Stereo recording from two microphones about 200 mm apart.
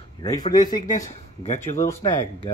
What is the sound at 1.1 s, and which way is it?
Speech, 35° left (ahead or behind).